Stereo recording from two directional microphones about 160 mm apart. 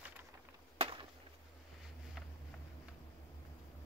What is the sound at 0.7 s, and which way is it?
Chop, 35° right (ahead or behind).